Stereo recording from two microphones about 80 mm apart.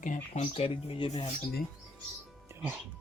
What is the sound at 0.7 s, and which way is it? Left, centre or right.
Speech, left.